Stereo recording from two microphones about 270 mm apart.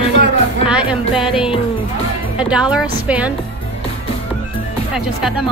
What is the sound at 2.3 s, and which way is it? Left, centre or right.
Speech, centre.